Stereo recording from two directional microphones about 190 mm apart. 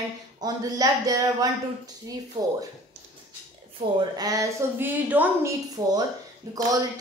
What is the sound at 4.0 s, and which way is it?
A woman's voice, 20° right (ahead or behind).